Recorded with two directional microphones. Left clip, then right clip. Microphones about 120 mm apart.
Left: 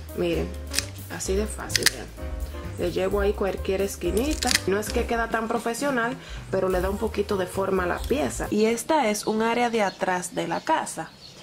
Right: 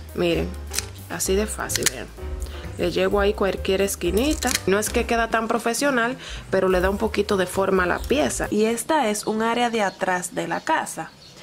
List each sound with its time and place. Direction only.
0.2 s speech: 40° right (ahead or behind)
1.7 s speech: 5° right (ahead or behind)
2.8 s speech: 40° right (ahead or behind)
8.5 s speech: 10° right (ahead or behind)